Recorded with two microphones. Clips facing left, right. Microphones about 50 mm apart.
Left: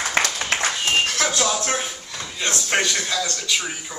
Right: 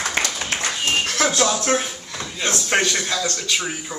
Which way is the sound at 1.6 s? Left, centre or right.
Centre.